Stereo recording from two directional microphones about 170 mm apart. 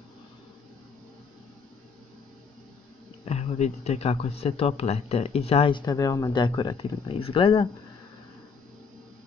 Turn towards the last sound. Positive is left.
turn(degrees=30)  # may be behind; listen again after turning